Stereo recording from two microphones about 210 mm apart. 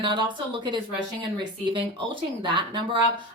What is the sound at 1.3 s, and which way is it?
Speech, 20° right (ahead or behind).